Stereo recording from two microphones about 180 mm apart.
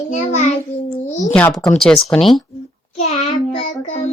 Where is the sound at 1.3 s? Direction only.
5° left (ahead or behind).